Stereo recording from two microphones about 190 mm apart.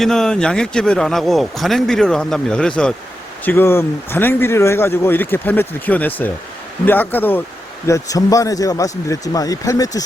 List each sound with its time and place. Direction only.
0.0 s a man's voice: 5° left (ahead or behind); by 10.0 s 20° left (ahead or behind)